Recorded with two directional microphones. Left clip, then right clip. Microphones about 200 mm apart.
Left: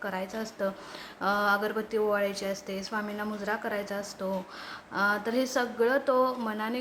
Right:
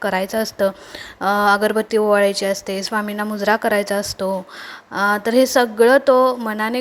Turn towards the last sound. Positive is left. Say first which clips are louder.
# right 11 dB
turn(degrees=-35)  # may be behind; listen again after turning